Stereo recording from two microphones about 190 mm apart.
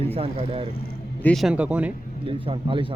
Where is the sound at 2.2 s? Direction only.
25° right (ahead or behind).